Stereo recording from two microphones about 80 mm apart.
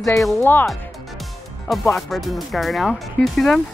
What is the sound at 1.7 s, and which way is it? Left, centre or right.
Speech, centre.